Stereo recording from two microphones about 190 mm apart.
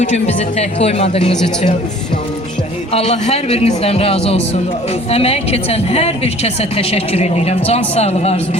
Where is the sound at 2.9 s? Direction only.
30° left (ahead or behind).